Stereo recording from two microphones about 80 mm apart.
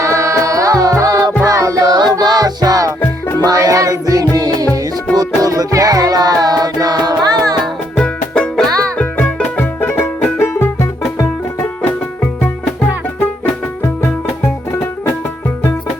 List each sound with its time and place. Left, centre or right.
0.0 s music: right
7.6 s music: centre
9.0 s music: centre; by 11.3 s left
11.6 s music: centre